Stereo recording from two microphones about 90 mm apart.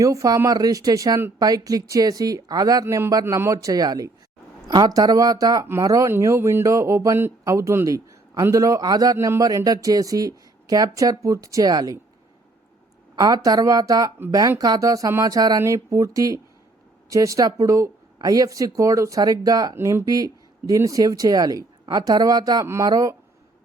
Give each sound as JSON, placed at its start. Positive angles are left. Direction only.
{"t": 0.0, "sound": "speech", "side_deg": -40}
{"t": 2.8, "sound": "a man's voice", "side_deg": -25}
{"t": 3.1, "sound": "speech", "side_deg": -40}
{"t": 13.1, "sound": "speech", "side_deg": -45}
{"t": 15.6, "sound": "speech", "side_deg": -35}
{"t": 19.7, "sound": "speech", "side_deg": -30}
{"t": 22.6, "sound": "speech", "side_deg": -30}
{"t": 22.9, "sound": "speech", "side_deg": -40}